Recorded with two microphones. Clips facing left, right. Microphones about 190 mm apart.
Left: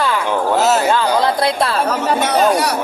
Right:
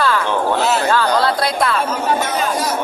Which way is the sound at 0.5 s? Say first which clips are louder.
Left 5 dB; 40° left (ahead or behind).